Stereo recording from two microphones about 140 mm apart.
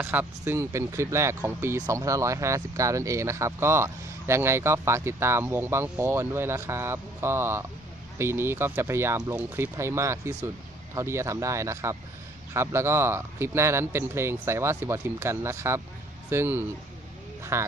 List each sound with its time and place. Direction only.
0.0 s speech: 15° right (ahead or behind)